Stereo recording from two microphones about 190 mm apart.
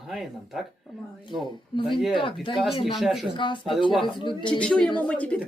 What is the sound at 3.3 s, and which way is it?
Speech, 25° left (ahead or behind).